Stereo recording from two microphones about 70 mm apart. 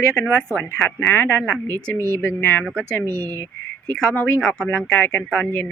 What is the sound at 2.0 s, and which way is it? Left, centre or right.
Speech, right.